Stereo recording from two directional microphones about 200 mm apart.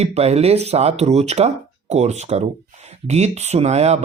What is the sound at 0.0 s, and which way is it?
Speech, 30° right (ahead or behind).